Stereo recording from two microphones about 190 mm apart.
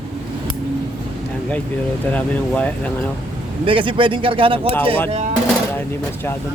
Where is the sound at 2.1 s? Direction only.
5° left (ahead or behind).